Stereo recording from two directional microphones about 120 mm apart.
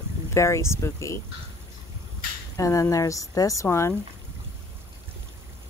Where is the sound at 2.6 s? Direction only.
25° left (ahead or behind).